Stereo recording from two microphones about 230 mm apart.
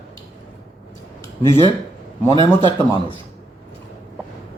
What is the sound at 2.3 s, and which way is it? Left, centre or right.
Speech, right.